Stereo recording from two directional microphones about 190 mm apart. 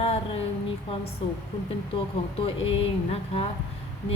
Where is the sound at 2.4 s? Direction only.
30° left (ahead or behind).